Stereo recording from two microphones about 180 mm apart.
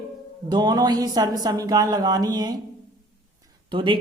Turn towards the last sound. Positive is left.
turn(degrees=-25)  # may be behind; listen again after turning